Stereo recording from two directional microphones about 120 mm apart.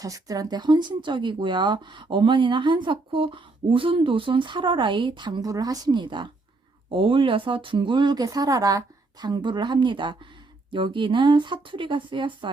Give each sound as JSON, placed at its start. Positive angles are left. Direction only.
{"t": 0.0, "sound": "speech", "side_deg": -30}